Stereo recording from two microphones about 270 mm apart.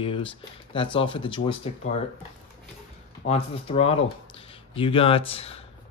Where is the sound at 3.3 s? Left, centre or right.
Left.